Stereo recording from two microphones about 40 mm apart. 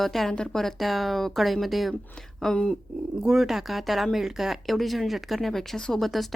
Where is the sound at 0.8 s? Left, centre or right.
Centre.